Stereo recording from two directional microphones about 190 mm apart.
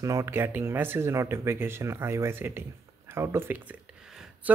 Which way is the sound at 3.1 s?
15° right (ahead or behind).